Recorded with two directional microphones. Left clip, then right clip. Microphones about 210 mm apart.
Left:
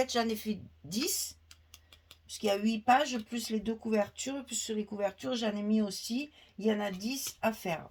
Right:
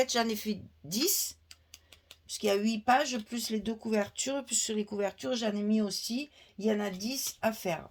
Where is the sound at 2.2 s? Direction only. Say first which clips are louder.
Right 2 dB; 35° right (ahead or behind).